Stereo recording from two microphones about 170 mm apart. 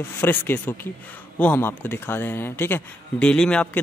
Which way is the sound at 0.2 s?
10° left (ahead or behind).